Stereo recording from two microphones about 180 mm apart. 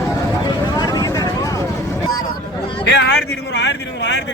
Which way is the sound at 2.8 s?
65° left (ahead or behind).